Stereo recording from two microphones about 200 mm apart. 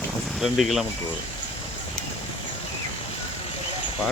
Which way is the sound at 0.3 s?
Centre (ahead or behind).